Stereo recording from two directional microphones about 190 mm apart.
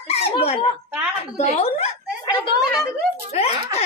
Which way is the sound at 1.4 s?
35° left (ahead or behind).